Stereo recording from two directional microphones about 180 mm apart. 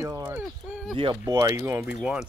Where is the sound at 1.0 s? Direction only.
25° right (ahead or behind); by 2.3 s 5° right (ahead or behind).